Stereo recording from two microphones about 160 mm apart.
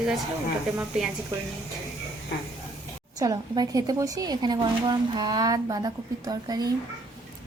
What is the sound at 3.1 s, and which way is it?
A woman's voice, 25° right (ahead or behind).